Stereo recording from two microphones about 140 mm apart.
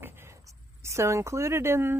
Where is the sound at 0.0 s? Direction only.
15° right (ahead or behind).